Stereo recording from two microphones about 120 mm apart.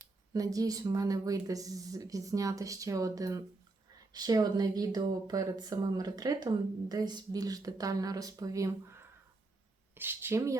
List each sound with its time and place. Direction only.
0.3 s speech: 30° right (ahead or behind)